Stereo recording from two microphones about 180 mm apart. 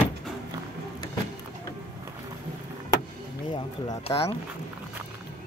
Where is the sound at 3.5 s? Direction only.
25° left (ahead or behind).